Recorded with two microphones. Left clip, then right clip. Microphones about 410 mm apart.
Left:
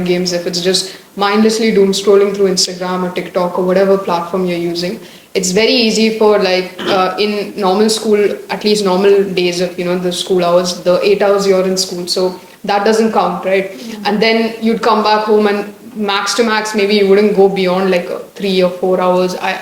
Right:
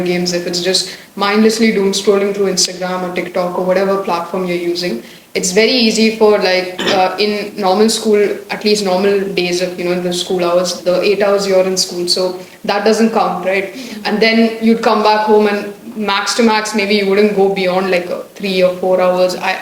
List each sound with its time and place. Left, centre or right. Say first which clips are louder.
0.0 s speech: left 1 dB; left
3.3 s speech: left 2 dB; left